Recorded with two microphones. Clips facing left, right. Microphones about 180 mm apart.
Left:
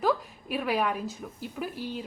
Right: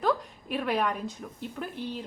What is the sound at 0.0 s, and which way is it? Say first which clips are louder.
A woman's voice: left 1 dB; 5° left (ahead or behind).